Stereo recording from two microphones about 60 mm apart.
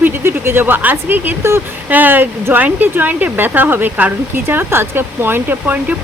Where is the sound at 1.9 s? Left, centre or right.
Right.